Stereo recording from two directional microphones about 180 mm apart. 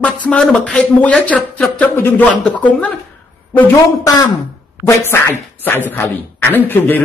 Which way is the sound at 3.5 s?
20° left (ahead or behind).